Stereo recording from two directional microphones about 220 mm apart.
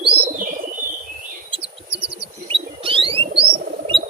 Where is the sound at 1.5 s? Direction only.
25° right (ahead or behind).